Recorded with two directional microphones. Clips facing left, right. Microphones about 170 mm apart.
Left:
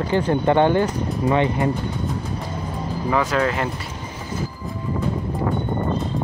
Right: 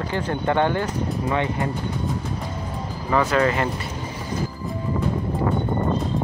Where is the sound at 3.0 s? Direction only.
Centre (ahead or behind).